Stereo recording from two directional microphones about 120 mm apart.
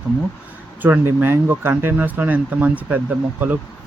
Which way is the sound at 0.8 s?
15° right (ahead or behind).